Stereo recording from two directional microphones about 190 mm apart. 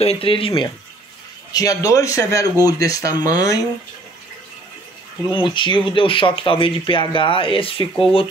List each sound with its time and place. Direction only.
0.0 s speech: 30° left (ahead or behind)
5.3 s speech: 25° left (ahead or behind)